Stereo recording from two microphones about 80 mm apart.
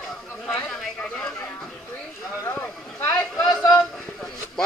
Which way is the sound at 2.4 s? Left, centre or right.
Left.